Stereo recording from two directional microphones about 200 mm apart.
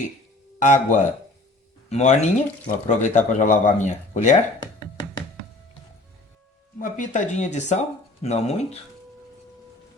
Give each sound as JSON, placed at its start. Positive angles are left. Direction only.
{"t": 0.6, "sound": "speech", "side_deg": 40}
{"t": 6.7, "sound": "speech", "side_deg": 40}